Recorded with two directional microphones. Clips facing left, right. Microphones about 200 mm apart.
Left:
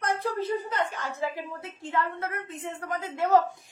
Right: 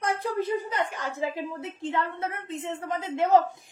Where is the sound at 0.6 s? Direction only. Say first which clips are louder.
Even; 15° right (ahead or behind).